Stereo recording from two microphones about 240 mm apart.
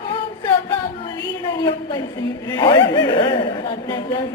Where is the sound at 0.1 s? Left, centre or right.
Centre.